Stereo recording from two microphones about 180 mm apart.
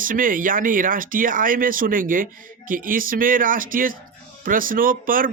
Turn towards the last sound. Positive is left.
turn(degrees=-50)  # may be behind; listen again after turning